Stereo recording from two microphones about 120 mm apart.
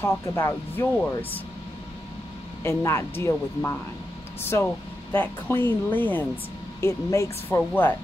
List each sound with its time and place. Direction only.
0.0 s speech: 20° left (ahead or behind)
2.6 s speech: 25° left (ahead or behind)